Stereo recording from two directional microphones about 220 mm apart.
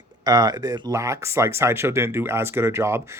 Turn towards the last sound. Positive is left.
turn(degrees=-10)  # may be behind; listen again after turning